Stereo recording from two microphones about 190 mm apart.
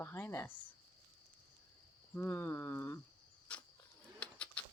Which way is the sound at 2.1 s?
10° left (ahead or behind).